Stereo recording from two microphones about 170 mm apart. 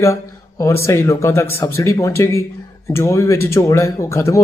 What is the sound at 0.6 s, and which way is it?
Speech, 15° left (ahead or behind).